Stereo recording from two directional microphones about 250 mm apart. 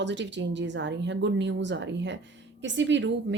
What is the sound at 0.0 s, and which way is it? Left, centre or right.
Speech, right.